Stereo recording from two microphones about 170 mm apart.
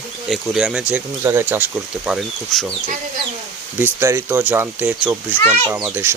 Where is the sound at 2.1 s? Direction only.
Centre (ahead or behind).